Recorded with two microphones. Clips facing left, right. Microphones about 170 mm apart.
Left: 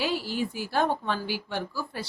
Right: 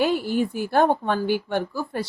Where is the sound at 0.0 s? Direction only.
55° right (ahead or behind).